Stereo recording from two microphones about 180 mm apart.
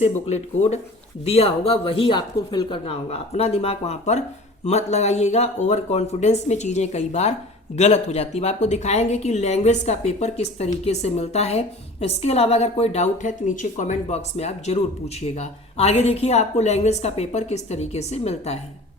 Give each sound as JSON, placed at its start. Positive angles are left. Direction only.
{"t": 0.3, "sound": "a woman's voice", "side_deg": 40}